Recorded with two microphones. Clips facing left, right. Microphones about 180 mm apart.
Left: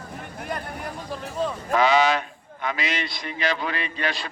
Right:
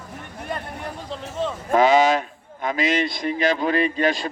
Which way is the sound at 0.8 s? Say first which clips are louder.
Right 1 dB; 25° right (ahead or behind).